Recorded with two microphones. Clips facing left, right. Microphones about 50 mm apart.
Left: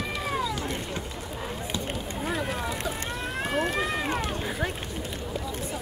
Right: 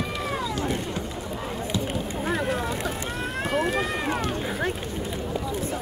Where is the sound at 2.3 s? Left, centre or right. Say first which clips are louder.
Right 3 dB; centre.